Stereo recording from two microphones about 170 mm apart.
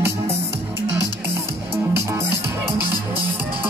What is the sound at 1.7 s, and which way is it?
Music, 15° right (ahead or behind).